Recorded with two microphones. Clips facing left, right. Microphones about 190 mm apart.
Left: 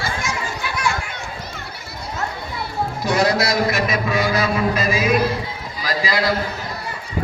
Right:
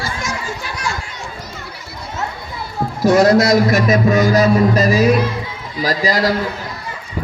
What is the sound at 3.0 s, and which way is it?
A man's voice, 45° right (ahead or behind).